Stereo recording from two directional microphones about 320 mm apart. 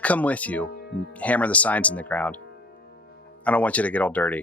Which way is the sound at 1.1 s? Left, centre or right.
Centre.